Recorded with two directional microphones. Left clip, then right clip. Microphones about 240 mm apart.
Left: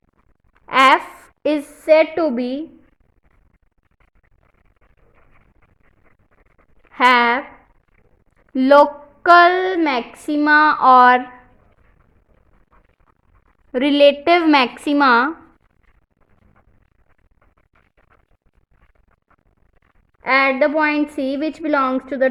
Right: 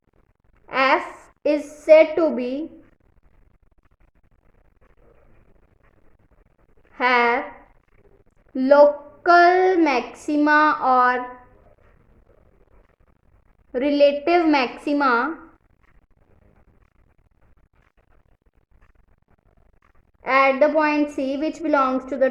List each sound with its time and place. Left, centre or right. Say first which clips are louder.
0.6 s a sound: left 6 dB; left
1.2 s speech: left 1 dB; left
6.9 s a child's voice: left 5 dB; left
8.5 s a child's voice: left 2 dB; left
13.7 s a child's voice: left 4 dB; left
20.2 s a woman's voice: left 1 dB; centre